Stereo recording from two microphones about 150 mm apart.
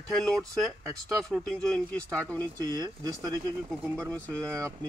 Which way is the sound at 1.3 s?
5° left (ahead or behind).